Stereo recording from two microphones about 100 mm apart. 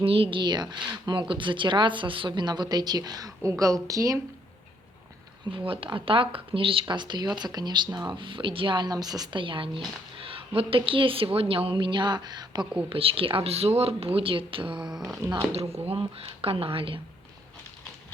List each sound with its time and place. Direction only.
0.0 s a woman's voice: 70° right (ahead or behind); by 4.2 s 35° right (ahead or behind)
5.5 s a woman's voice: 60° right (ahead or behind); by 9.4 s 40° right (ahead or behind)
9.4 s a woman's voice: 60° right (ahead or behind)
12.9 s speech: 65° right (ahead or behind)
14.8 s speech: 5° right (ahead or behind)
15.9 s speech: 75° right (ahead or behind)